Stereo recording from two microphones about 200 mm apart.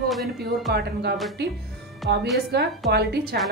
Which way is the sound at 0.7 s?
55° right (ahead or behind).